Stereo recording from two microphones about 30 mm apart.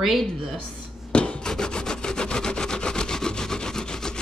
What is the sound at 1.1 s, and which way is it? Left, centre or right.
Rub, left.